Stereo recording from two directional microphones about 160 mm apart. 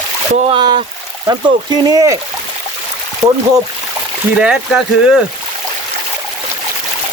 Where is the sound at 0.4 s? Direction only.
30° right (ahead or behind).